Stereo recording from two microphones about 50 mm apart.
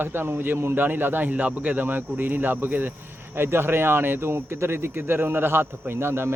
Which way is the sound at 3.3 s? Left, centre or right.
Right.